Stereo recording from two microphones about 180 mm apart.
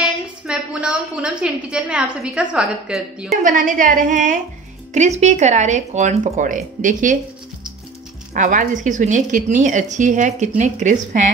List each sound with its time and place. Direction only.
0.0 s a woman's voice: 5° right (ahead or behind)
3.4 s speech: 45° right (ahead or behind)
8.3 s speech: 45° right (ahead or behind)